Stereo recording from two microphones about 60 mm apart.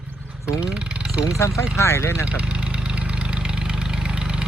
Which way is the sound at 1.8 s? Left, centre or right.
Left.